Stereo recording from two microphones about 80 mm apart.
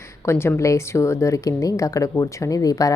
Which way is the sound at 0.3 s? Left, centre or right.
Left.